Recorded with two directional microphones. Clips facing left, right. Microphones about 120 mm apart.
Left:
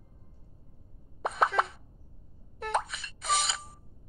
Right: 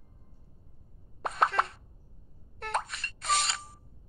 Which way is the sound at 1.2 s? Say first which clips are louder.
Left 1 dB; centre (ahead or behind).